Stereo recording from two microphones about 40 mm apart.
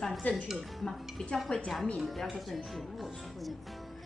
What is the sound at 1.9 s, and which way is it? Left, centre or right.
A woman's voice, centre.